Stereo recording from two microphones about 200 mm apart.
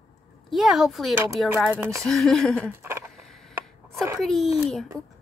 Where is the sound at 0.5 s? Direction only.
Centre (ahead or behind).